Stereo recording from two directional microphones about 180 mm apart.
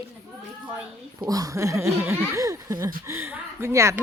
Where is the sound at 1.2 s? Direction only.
20° right (ahead or behind).